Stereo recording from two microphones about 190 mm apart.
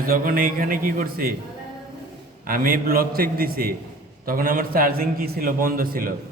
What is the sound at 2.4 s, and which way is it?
A man's voice, 50° right (ahead or behind).